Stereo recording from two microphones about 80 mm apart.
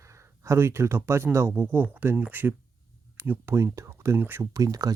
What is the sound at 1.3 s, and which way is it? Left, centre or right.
Speech, right.